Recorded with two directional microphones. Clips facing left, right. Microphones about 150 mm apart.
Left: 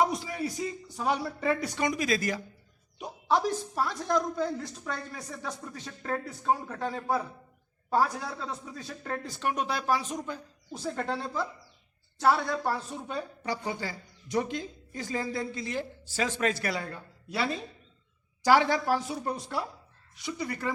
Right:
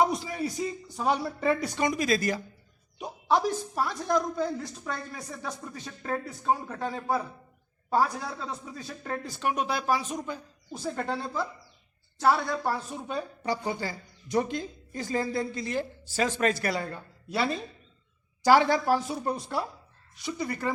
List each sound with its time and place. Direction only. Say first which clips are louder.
0.0 s speech: right 2 dB; 25° right (ahead or behind)
3.0 s a woman's voice: right 1 dB; 15° right (ahead or behind)
13.4 s a woman's voice: right 4 dB; 35° right (ahead or behind)
18.4 s a woman's voice: right 2 dB; 35° right (ahead or behind)